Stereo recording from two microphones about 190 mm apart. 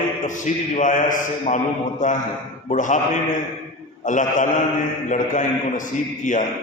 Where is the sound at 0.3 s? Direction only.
40° left (ahead or behind).